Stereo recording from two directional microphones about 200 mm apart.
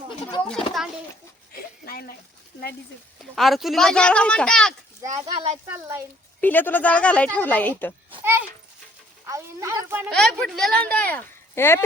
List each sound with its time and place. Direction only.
0.2 s a sound: 25° left (ahead or behind)
1.8 s speech: 50° left (ahead or behind)
3.3 s speech: centre (ahead or behind)
5.2 s speech: 30° right (ahead or behind)
5.7 s speech: 15° right (ahead or behind)
6.4 s speech: 10° left (ahead or behind)
8.2 s a child's voice: 10° right (ahead or behind)
10.1 s speech: centre (ahead or behind)